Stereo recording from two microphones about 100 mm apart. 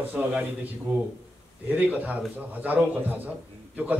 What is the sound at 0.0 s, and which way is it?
Speech, 15° right (ahead or behind).